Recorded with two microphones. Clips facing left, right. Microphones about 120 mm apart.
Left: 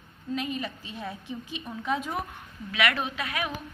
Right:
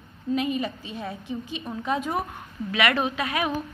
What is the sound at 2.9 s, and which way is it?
Speech, 40° right (ahead or behind).